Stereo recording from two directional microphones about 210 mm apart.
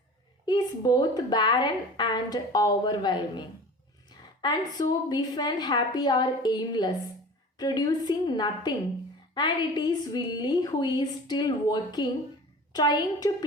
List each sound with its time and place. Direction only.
0.4 s a woman's voice: 20° left (ahead or behind)